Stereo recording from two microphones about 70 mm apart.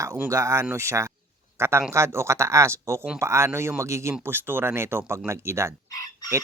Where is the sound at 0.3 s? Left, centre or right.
Right.